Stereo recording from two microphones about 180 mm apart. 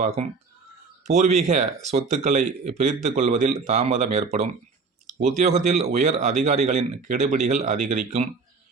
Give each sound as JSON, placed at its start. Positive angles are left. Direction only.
{"t": 1.0, "sound": "speech", "side_deg": -40}